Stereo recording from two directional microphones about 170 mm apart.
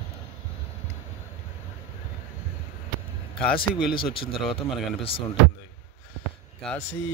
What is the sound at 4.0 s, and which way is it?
A man's voice, 30° left (ahead or behind).